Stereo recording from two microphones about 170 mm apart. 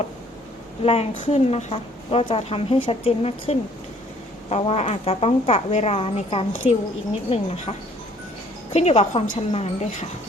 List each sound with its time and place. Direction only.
0.8 s speech: 35° left (ahead or behind)